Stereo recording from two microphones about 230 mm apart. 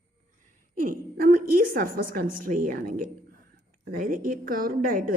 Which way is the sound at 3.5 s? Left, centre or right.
Right.